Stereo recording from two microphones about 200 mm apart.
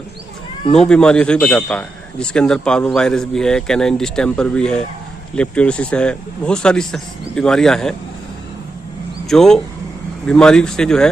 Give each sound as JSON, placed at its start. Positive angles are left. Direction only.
{"t": 0.7, "sound": "a man's voice", "side_deg": 5}
{"t": 9.2, "sound": "a man's voice", "side_deg": 0}